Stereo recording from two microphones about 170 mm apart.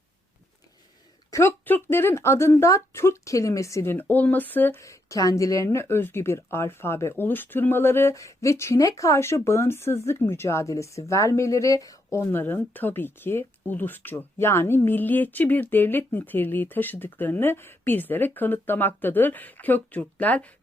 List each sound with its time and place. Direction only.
1.3 s speech: 15° left (ahead or behind)